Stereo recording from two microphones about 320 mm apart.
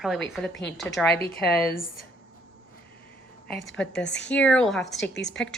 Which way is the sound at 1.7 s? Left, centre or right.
Left.